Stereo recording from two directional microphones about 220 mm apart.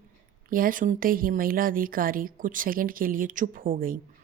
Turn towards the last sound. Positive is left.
turn(degrees=-40)  # may be behind; listen again after turning